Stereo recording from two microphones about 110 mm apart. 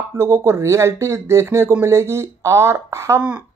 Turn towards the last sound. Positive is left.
turn(degrees=-25)  # may be behind; listen again after turning